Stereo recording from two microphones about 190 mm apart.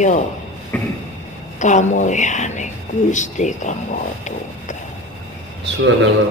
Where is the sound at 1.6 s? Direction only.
40° left (ahead or behind).